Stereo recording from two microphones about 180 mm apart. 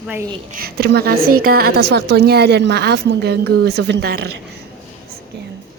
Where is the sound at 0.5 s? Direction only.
60° right (ahead or behind).